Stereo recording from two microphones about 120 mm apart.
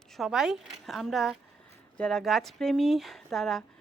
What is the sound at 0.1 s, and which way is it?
Speech, centre (ahead or behind).